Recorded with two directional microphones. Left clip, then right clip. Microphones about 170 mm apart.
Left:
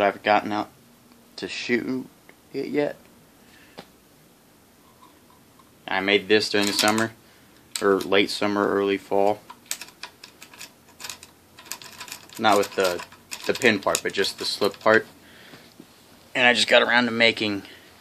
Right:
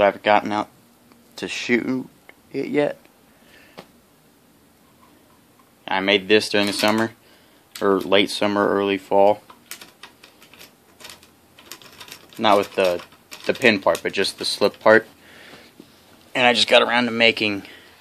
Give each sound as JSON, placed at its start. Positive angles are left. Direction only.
{"t": 0.0, "sound": "speech", "side_deg": -55}
{"t": 5.9, "sound": "speech", "side_deg": -50}
{"t": 12.4, "sound": "speech", "side_deg": -45}
{"t": 16.3, "sound": "speech", "side_deg": -25}